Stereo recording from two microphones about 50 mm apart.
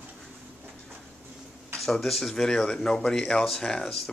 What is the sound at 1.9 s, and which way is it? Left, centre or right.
Speech, centre.